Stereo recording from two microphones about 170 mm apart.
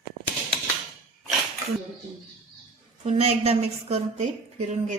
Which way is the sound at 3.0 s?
40° right (ahead or behind).